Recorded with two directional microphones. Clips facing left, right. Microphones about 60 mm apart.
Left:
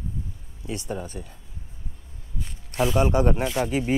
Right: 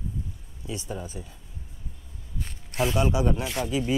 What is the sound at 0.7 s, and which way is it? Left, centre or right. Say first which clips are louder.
Speech: left 3 dB; left.